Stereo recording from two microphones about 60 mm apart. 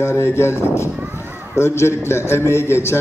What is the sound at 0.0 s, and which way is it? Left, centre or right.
A man's voice, left.